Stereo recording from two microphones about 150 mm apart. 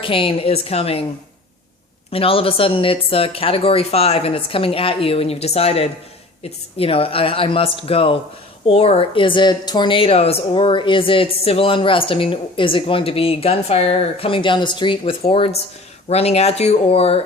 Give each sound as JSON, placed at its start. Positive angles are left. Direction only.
{"t": 0.0, "sound": "speech", "side_deg": 35}
{"t": 2.0, "sound": "speech", "side_deg": 40}